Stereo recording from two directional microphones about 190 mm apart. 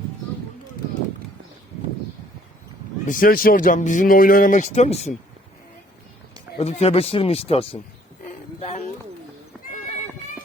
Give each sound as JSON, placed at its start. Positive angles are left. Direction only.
{"t": 3.1, "sound": "speech", "side_deg": 50}
{"t": 6.6, "sound": "speech", "side_deg": 35}
{"t": 8.2, "sound": "a sound", "side_deg": 40}